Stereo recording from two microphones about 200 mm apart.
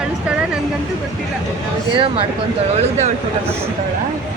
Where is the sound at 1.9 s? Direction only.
25° right (ahead or behind).